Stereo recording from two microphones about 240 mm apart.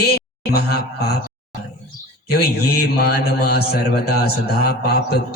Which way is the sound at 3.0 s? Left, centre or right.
Left.